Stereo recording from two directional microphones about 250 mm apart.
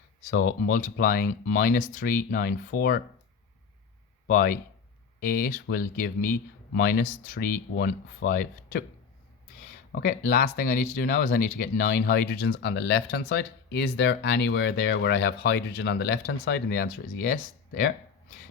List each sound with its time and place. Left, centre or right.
0.3 s speech: left
5.2 s speech: left
10.0 s speech: left